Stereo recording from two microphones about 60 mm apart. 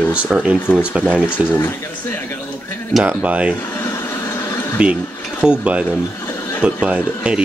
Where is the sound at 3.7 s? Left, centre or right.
Left.